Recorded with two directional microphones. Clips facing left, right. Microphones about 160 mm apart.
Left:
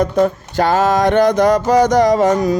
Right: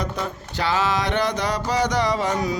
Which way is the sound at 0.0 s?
50° left (ahead or behind).